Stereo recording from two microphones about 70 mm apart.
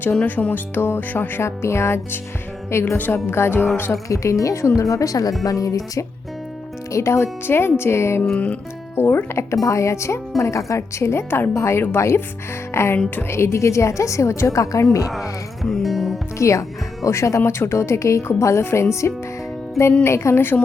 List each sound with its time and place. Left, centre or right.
0.0 s speech: left
1.4 s speech: left
4.1 s speech: left
6.9 s speech: left
15.8 s music: centre
16.4 s speech: left